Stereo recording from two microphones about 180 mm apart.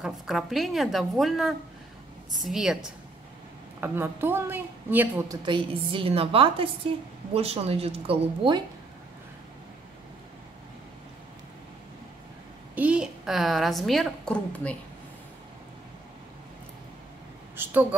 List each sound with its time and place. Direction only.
0.0 s a woman's voice: centre (ahead or behind)
3.8 s a woman's voice: 10° right (ahead or behind)
5.4 s a woman's voice: 25° right (ahead or behind)
12.7 s a woman's voice: 5° right (ahead or behind)
17.6 s a sound: 10° right (ahead or behind)